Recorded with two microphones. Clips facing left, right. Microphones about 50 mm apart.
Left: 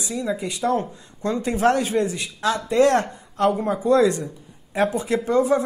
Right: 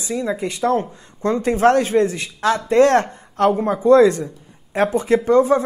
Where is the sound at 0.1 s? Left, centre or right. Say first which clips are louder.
Right 4 dB; right.